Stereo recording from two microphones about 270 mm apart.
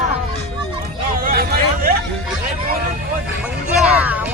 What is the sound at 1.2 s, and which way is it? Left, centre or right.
Hubbub, right.